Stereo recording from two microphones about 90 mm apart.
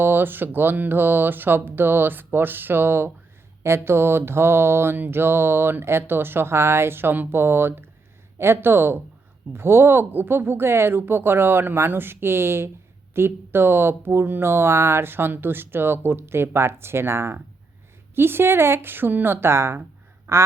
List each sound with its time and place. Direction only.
0.0 s mantra: 25° right (ahead or behind)
20.3 s goose: 30° right (ahead or behind)